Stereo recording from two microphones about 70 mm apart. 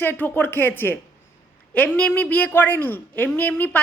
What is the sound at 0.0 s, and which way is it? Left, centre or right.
Speech, left.